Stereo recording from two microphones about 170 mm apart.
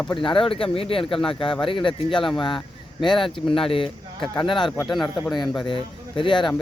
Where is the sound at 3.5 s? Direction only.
30° left (ahead or behind).